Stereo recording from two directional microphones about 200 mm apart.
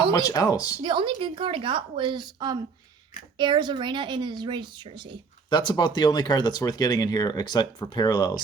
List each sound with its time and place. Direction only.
0.1 s speech: 15° left (ahead or behind)
0.8 s speech: 25° right (ahead or behind)
5.5 s speech: 20° left (ahead or behind)